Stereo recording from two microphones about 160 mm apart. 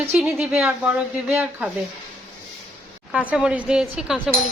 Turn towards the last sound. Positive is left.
turn(degrees=-5)  # may be behind; listen again after turning